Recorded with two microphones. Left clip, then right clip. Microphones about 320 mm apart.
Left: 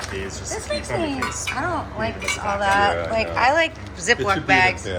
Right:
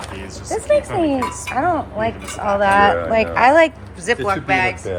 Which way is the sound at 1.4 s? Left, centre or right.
Right.